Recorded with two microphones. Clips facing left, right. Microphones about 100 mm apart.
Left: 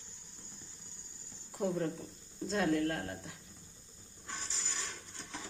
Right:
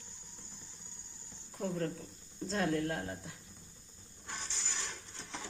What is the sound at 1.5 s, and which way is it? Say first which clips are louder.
Speech: left 2 dB; 10° left (ahead or behind).